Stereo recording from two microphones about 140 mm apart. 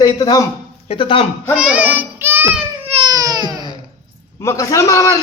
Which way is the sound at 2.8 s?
45° right (ahead or behind).